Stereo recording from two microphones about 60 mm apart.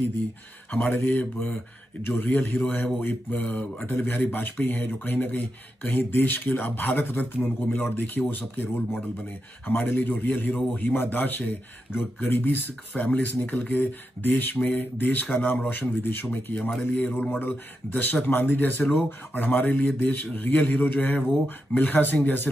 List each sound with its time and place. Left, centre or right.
0.8 s speech: left
3.9 s speech: left
7.3 s speech: centre
7.7 s speech: left